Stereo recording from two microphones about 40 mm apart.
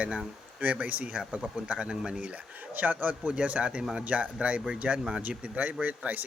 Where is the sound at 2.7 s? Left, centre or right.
Right.